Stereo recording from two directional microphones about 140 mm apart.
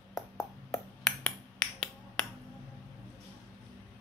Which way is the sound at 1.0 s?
5° left (ahead or behind).